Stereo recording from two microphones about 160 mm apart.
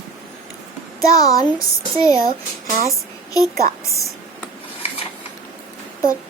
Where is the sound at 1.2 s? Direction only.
20° left (ahead or behind).